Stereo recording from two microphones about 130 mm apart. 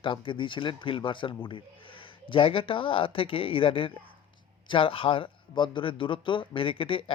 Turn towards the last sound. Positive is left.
turn(degrees=45)  # may be behind; listen again after turning